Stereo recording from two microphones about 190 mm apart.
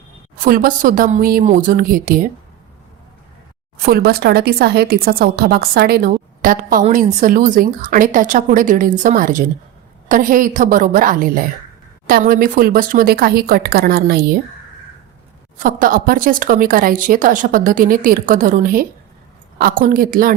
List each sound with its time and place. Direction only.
0.4 s speech: 45° right (ahead or behind)
3.8 s a woman's voice: 55° right (ahead or behind)
15.5 s speech: 45° right (ahead or behind)